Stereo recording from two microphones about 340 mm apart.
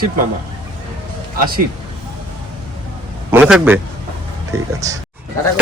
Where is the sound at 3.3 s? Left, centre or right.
Centre.